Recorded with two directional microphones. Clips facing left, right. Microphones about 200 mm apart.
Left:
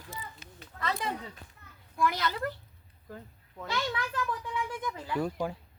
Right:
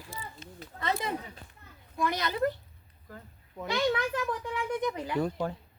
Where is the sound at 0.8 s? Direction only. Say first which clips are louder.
Right 2 dB; 25° right (ahead or behind).